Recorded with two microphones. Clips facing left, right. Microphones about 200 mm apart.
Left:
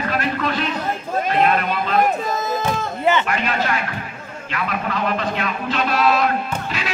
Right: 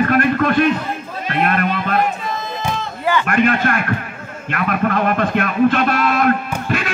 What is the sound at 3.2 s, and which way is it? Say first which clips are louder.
A man's voice: right 6 dB; 55° right (ahead or behind).